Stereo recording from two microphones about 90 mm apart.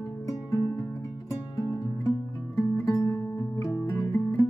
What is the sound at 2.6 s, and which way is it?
Music, 40° left (ahead or behind).